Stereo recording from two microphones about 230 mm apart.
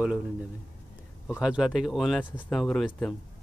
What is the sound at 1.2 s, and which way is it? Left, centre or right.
Speech, centre.